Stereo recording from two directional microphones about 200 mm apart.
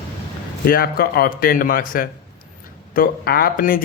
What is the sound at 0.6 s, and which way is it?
A man's voice, 50° left (ahead or behind).